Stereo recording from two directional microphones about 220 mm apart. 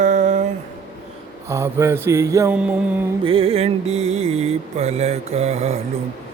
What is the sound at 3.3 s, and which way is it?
Mantra, 25° right (ahead or behind).